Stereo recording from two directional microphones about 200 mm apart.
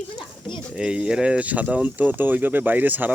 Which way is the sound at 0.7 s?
5° right (ahead or behind).